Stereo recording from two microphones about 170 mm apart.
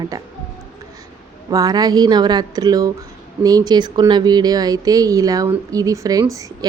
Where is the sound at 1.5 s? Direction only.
25° right (ahead or behind).